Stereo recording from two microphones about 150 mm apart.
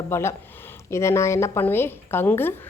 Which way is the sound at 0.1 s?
15° left (ahead or behind).